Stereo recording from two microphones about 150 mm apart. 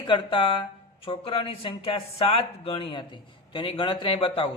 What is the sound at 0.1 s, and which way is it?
Speech, 35° left (ahead or behind).